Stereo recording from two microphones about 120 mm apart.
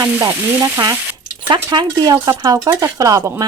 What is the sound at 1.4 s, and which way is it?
A woman's voice, 40° right (ahead or behind).